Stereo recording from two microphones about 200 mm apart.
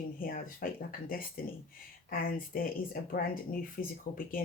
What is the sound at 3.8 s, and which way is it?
Speech, 45° left (ahead or behind).